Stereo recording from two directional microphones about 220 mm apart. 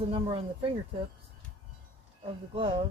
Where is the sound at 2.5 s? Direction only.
25° right (ahead or behind).